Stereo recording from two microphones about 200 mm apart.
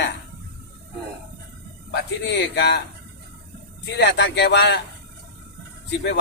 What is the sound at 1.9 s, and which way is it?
Speech, 60° left (ahead or behind).